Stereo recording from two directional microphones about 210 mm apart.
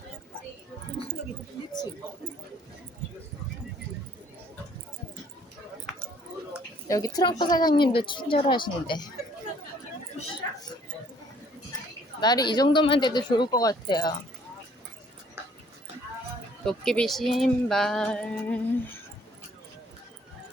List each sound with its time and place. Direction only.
6.8 s speech: 15° left (ahead or behind)
12.2 s speech: 20° left (ahead or behind)
16.6 s speech: 5° left (ahead or behind)